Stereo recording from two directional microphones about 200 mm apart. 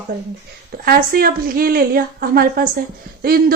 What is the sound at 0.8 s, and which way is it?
Speech, 50° right (ahead or behind).